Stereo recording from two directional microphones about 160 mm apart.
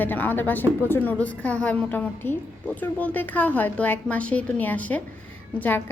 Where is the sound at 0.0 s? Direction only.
10° left (ahead or behind).